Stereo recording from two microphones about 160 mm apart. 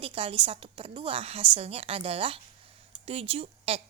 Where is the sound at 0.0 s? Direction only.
35° right (ahead or behind).